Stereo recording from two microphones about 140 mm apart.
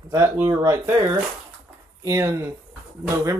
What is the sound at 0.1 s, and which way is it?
Speech, 20° right (ahead or behind).